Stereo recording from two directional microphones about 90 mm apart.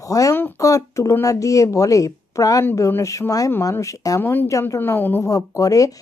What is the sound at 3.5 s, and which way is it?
Speech, 30° left (ahead or behind).